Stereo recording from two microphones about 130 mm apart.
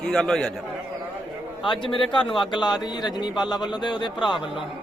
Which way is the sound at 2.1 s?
40° left (ahead or behind).